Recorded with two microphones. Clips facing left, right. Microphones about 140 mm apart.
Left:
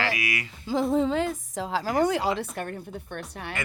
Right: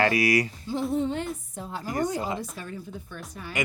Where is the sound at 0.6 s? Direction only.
90° left; by 3.5 s 65° left (ahead or behind).